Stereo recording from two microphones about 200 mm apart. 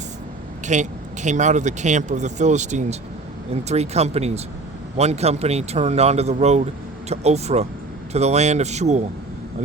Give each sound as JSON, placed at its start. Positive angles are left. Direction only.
{"t": 0.6, "sound": "speech", "side_deg": -35}